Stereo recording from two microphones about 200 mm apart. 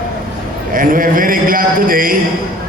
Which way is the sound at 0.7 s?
45° right (ahead or behind).